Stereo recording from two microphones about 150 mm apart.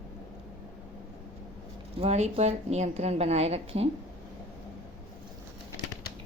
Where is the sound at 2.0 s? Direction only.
45° right (ahead or behind).